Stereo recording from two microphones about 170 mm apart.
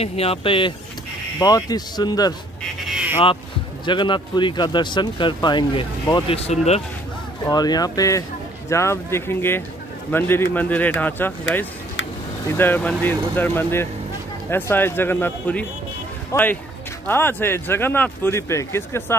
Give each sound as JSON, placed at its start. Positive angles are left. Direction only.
{"t": 0.0, "sound": "speech", "side_deg": 35}
{"t": 3.8, "sound": "speech", "side_deg": 25}
{"t": 7.4, "sound": "speech", "side_deg": 25}
{"t": 12.5, "sound": "speech", "side_deg": 10}